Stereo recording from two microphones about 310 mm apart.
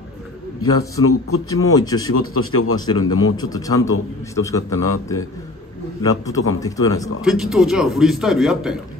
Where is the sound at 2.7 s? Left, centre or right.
Centre.